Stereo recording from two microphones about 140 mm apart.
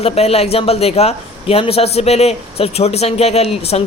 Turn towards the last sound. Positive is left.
turn(degrees=45)  # may be behind; listen again after turning